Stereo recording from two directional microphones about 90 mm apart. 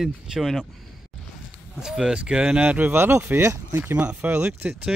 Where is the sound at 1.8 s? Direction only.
5° right (ahead or behind).